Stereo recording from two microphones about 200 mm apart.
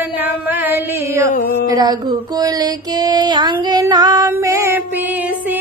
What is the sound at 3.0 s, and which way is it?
Female singing, 20° right (ahead or behind).